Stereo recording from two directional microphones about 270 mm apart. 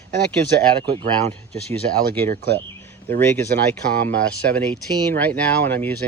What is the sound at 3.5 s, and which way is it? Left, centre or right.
Speech, right.